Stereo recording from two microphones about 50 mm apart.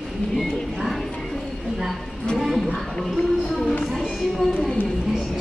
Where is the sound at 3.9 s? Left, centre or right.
Centre.